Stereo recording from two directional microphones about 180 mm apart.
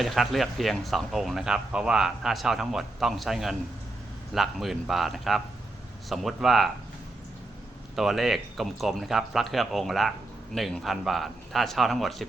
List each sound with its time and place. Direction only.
0.0 s speech: centre (ahead or behind)
7.9 s speech: centre (ahead or behind)